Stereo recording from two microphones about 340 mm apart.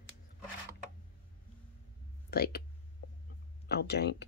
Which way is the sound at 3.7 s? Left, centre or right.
Left.